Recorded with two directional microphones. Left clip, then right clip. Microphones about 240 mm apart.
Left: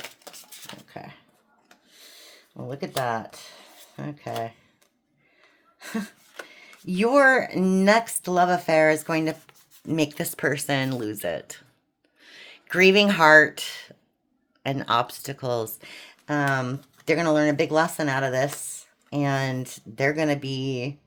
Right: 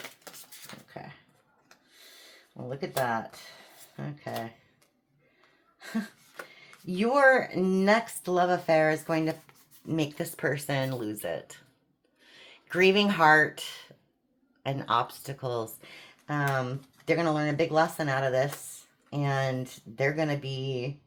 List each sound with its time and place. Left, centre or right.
3.1 s speech: left
5.8 s a sound: left
6.5 s speech: left